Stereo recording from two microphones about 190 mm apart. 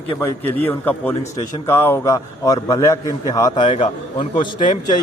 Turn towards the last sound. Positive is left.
turn(degrees=25)  # may be behind; listen again after turning